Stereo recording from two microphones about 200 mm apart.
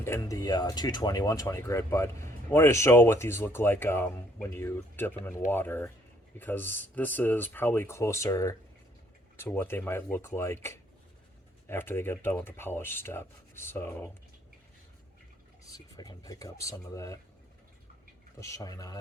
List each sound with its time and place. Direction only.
0.0 s speech: 15° left (ahead or behind)
15.7 s speech: 20° left (ahead or behind)
18.3 s speech: 15° left (ahead or behind)